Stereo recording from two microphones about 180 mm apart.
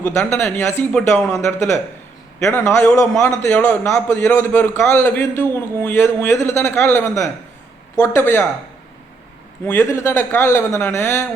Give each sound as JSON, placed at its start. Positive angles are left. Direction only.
{"t": 0.2, "sound": "a man's voice", "side_deg": 15}
{"t": 9.6, "sound": "a man's voice", "side_deg": 15}